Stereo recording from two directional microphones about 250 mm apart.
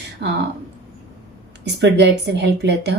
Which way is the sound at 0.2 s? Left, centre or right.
Right.